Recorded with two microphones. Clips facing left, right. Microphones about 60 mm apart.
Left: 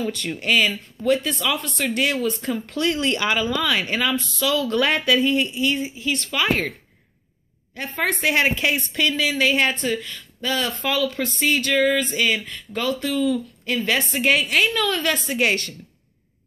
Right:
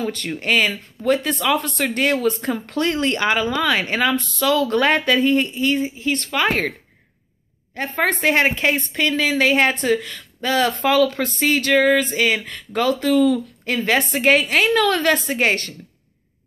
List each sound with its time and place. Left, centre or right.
0.0 s speech: right
0.3 s speech: right
7.7 s speech: right
9.8 s speech: right